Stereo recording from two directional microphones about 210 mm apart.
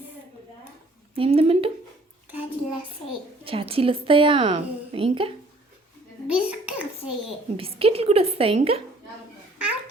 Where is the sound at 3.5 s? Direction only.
25° right (ahead or behind).